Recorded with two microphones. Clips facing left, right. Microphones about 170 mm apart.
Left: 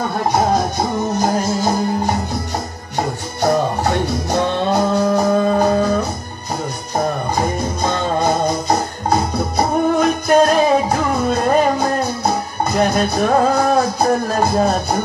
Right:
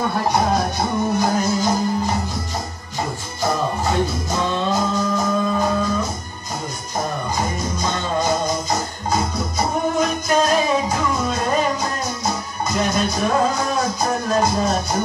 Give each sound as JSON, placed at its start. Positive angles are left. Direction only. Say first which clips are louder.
{"t": 1.1, "sound": "music", "louder": "left 2 dB", "side_deg": 40}
{"t": 3.3, "sound": "music", "louder": "left 5 dB", "side_deg": 65}
{"t": 7.3, "sound": "music", "louder": "left 4 dB", "side_deg": 60}